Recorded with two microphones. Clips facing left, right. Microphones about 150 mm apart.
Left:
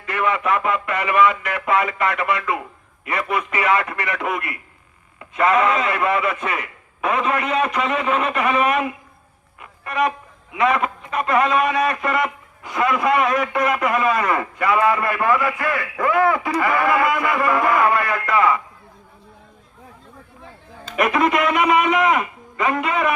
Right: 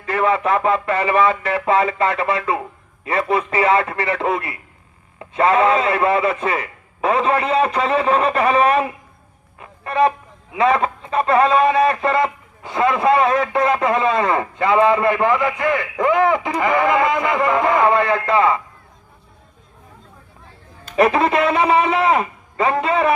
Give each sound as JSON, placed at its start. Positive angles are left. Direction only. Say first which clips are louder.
{"t": 0.0, "sound": "a man's voice", "louder": "right 4 dB", "side_deg": -30}
{"t": 20.9, "sound": "a man's voice", "louder": "right 3 dB", "side_deg": -30}